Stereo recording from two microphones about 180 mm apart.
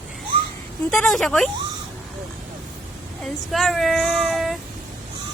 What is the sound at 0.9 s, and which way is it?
Speech, 5° left (ahead or behind).